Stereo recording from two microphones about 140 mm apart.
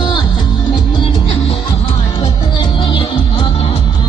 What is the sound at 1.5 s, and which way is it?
Music, 40° left (ahead or behind).